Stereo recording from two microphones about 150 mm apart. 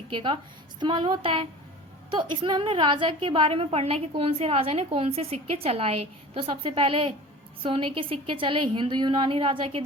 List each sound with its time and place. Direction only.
0.1 s a woman's voice: 35° right (ahead or behind)